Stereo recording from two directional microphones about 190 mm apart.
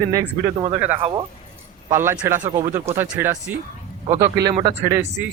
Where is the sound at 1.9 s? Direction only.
10° right (ahead or behind).